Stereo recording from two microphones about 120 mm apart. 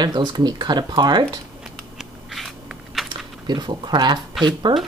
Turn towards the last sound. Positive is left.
turn(degrees=-40)  # may be behind; listen again after turning